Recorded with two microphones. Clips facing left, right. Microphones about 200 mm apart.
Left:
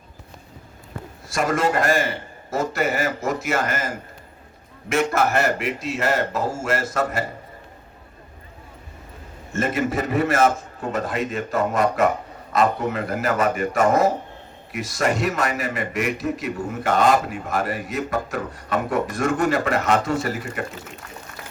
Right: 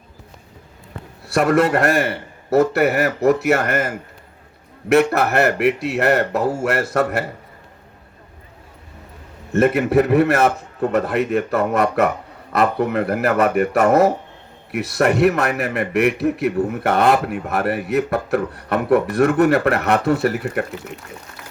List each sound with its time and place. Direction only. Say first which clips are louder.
1.3 s a man's voice: right 6 dB; 60° right (ahead or behind)
9.5 s a man's voice: right 7 dB; 60° right (ahead or behind)